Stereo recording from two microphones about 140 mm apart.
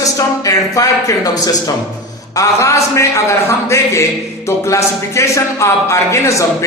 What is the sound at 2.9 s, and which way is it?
A man's voice, 20° left (ahead or behind).